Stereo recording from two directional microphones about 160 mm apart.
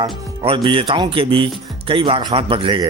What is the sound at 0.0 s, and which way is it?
Speech, 35° right (ahead or behind).